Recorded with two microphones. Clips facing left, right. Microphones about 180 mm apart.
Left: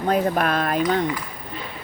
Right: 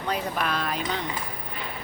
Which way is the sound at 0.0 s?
50° left (ahead or behind).